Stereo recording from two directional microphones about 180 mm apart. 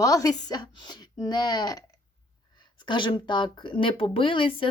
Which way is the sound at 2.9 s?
25° left (ahead or behind).